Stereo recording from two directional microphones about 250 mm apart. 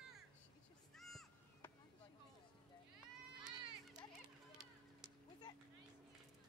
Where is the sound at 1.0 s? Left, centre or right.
Centre.